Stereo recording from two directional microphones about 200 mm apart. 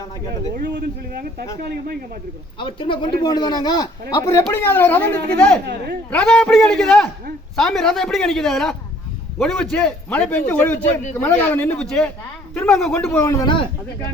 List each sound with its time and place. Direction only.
0.5 s a man's voice: 55° right (ahead or behind)
2.6 s speech: 25° left (ahead or behind); by 5.5 s 5° left (ahead or behind)
5.6 s a man's voice: 50° right (ahead or behind)
6.1 s a man's voice: 5° left (ahead or behind); by 13.7 s 20° left (ahead or behind)